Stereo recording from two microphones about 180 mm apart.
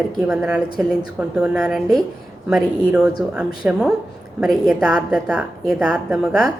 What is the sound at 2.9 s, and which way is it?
A woman's voice, 5° right (ahead or behind).